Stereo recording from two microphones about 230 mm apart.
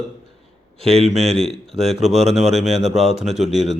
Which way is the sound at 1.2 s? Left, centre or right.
Centre.